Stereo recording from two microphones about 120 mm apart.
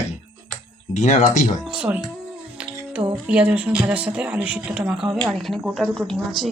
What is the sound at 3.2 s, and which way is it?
Speech, 10° right (ahead or behind).